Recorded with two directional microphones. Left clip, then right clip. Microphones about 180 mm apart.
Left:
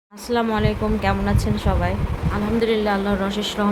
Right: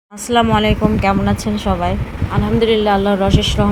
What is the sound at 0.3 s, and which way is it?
Speech, 15° right (ahead or behind).